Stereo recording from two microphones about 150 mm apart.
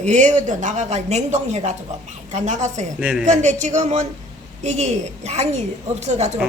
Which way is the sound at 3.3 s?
55° right (ahead or behind).